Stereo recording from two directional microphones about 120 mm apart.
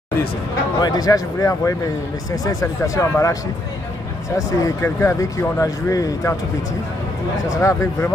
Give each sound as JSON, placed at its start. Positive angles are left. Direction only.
{"t": 0.7, "sound": "a man's voice", "side_deg": 35}
{"t": 4.6, "sound": "speech", "side_deg": 25}
{"t": 7.4, "sound": "speech", "side_deg": 25}